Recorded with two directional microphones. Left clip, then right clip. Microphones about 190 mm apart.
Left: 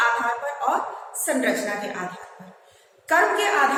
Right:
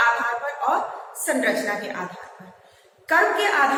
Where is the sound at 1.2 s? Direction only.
15° left (ahead or behind).